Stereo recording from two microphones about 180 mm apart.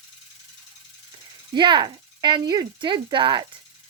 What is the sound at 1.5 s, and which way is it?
Speech, 25° right (ahead or behind).